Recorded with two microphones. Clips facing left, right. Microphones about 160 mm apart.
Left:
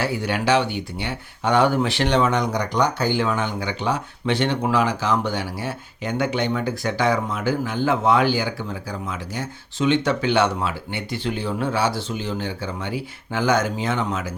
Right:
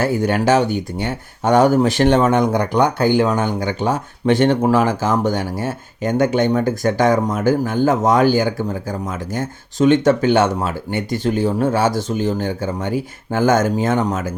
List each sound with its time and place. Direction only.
0.0 s speech: 45° right (ahead or behind)